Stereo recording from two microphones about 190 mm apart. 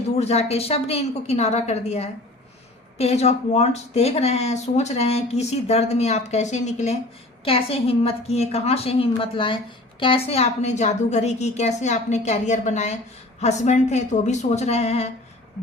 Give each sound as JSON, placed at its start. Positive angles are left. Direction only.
{"t": 0.2, "sound": "speech", "side_deg": 35}